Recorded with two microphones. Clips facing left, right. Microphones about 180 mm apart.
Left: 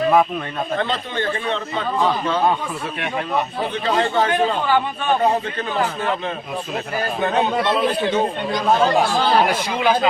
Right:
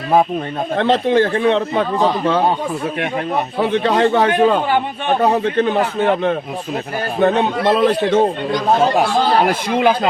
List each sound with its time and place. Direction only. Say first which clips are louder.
0.8 s a man's voice: right 15 dB; 75° right (ahead or behind)
3.6 s a man's voice: right 9 dB; 70° right (ahead or behind)
7.2 s a man's voice: right 5 dB; 75° right (ahead or behind)
9.6 s speech: right 3 dB; 55° right (ahead or behind)